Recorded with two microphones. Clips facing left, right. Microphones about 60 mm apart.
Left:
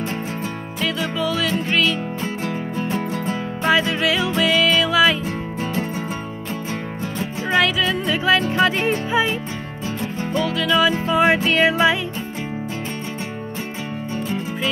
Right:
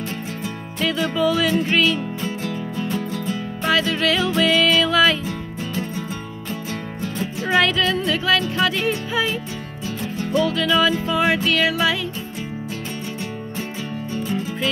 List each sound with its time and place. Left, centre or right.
0.7 s music: centre
2.2 s music: left
3.6 s music: centre
7.2 s music: centre
8.3 s music: left
10.4 s music: centre
10.9 s music: left